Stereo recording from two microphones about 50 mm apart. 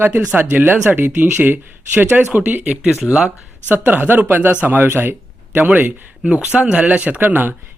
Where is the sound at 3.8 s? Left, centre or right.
Right.